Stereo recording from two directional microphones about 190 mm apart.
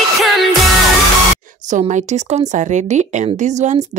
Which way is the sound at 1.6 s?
40° right (ahead or behind).